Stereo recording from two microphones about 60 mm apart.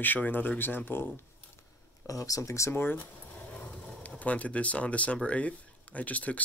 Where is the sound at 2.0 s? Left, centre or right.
Left.